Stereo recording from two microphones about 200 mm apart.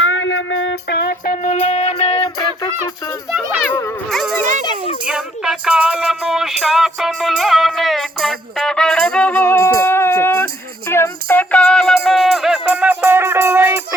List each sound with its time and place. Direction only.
0.0 s music: 75° left (ahead or behind); by 2.3 s 30° left (ahead or behind)
4.1 s a sound: centre (ahead or behind)
5.0 s music: 5° right (ahead or behind)